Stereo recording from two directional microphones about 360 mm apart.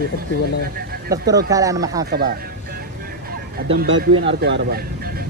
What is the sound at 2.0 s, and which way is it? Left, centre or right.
Music, right.